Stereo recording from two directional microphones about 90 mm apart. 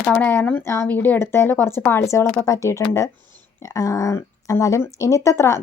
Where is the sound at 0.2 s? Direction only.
25° left (ahead or behind).